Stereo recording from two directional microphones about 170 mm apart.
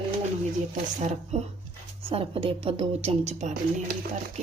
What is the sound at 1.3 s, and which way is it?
Speech, 40° right (ahead or behind).